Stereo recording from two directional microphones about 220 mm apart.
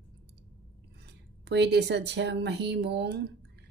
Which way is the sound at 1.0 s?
50° right (ahead or behind).